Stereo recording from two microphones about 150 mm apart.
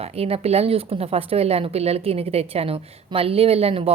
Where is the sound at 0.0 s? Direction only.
40° right (ahead or behind).